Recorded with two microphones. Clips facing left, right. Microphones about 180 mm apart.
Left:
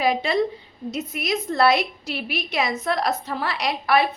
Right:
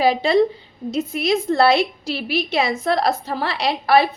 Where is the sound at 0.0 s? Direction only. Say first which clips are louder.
Right 5 dB; 30° right (ahead or behind).